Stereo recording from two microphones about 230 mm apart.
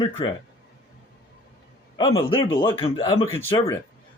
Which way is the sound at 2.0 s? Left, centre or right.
Left.